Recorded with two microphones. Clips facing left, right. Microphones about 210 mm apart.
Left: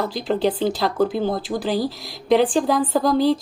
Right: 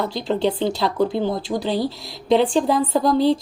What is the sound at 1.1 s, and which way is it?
Speech, 25° right (ahead or behind).